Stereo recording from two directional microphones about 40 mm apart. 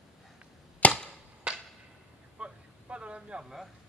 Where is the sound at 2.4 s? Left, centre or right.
Right.